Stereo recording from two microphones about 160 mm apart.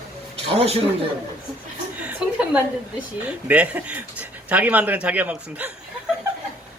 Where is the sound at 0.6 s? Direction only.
40° right (ahead or behind).